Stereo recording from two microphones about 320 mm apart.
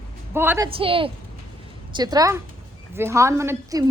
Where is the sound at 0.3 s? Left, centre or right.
Centre.